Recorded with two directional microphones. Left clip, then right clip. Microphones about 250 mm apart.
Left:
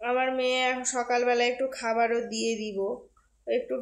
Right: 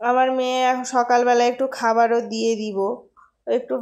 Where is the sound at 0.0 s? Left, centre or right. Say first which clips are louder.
Right 8 dB; centre.